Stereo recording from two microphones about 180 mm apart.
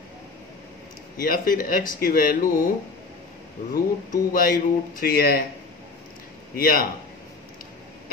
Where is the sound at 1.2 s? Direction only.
50° left (ahead or behind).